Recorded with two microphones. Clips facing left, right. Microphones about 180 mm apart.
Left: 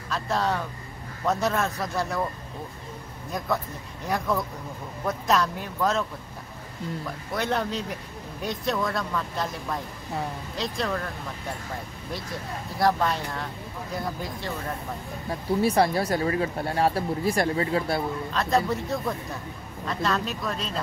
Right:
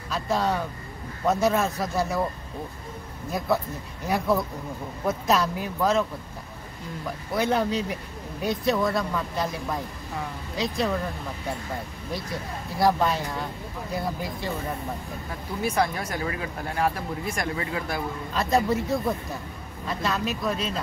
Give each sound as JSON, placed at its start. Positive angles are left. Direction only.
{"t": 0.1, "sound": "speech", "side_deg": 0}
{"t": 3.3, "sound": "speech", "side_deg": -5}
{"t": 5.0, "sound": "speech", "side_deg": -5}
{"t": 7.3, "sound": "speech", "side_deg": 0}
{"t": 12.7, "sound": "speech", "side_deg": 0}
{"t": 15.6, "sound": "speech", "side_deg": 35}
{"t": 18.3, "sound": "speech", "side_deg": -5}